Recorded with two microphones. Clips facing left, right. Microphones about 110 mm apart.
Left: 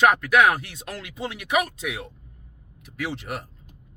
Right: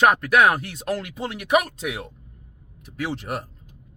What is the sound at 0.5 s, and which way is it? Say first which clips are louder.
Speech: right 6 dB; 40° right (ahead or behind).